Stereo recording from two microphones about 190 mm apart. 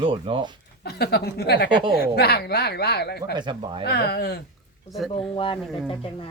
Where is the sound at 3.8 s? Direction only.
60° left (ahead or behind).